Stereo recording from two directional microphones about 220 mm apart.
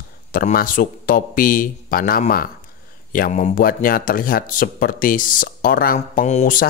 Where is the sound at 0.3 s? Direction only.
40° left (ahead or behind).